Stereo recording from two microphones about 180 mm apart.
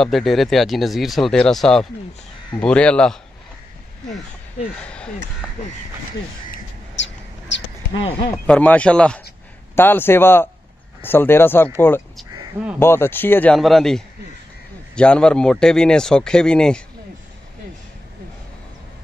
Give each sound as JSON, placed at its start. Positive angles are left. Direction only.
{"t": 0.0, "sound": "speech", "side_deg": 0}
{"t": 6.5, "sound": "bird", "side_deg": 85}
{"t": 8.5, "sound": "speech", "side_deg": 10}
{"t": 12.7, "sound": "speech", "side_deg": 15}